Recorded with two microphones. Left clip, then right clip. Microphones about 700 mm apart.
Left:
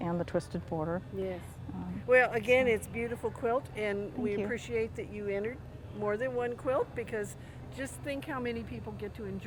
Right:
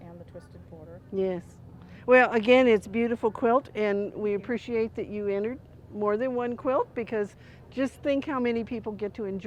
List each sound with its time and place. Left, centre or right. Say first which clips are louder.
0.0 s speech: left 13 dB; left
2.0 s speech: right 6 dB; right
7.8 s a woman's voice: right 11 dB; right